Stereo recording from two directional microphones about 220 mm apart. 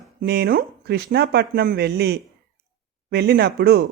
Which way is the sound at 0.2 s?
45° right (ahead or behind).